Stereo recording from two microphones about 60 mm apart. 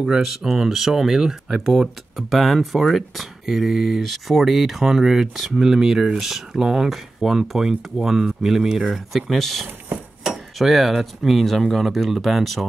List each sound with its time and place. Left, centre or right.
0.0 s speech: centre